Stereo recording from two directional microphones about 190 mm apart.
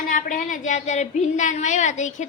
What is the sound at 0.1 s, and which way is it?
A woman's voice, 45° left (ahead or behind).